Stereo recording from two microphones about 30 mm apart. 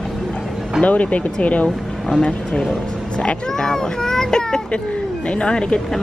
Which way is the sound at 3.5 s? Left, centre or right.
Centre.